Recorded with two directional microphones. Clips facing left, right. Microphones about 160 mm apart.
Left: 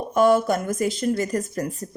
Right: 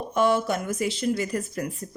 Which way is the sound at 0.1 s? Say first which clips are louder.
Left 5 dB; 45° left (ahead or behind).